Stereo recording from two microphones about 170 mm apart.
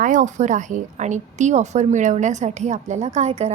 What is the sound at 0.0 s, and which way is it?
A woman's voice, 50° right (ahead or behind).